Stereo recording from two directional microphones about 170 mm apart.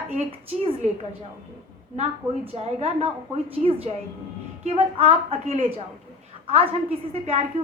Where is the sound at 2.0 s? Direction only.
35° right (ahead or behind).